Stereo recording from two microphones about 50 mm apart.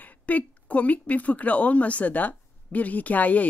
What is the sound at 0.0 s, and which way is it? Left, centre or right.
Speech, left.